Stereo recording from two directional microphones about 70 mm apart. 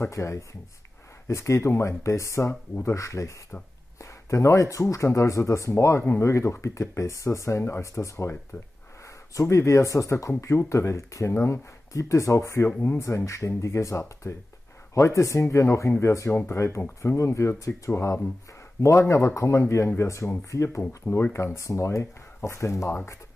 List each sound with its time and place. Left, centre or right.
0.1 s speech: left
16.3 s speech: left
16.5 s speech: left